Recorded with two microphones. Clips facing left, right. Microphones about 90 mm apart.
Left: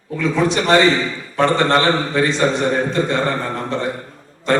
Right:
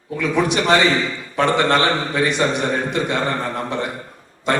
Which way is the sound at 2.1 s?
15° right (ahead or behind).